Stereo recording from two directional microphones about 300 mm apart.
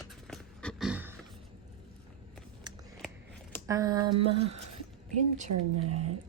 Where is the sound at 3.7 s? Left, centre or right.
Centre.